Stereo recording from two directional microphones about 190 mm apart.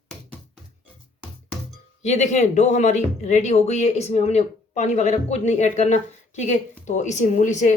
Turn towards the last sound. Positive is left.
turn(degrees=40)  # may be behind; listen again after turning